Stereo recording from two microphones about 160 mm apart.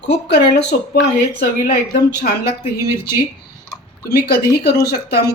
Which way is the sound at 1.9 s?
70° left (ahead or behind).